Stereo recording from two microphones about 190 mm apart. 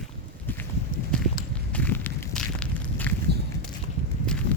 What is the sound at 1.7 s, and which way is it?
Walk, 10° left (ahead or behind).